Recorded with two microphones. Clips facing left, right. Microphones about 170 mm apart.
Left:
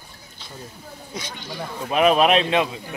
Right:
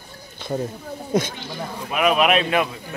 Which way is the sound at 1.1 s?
50° right (ahead or behind).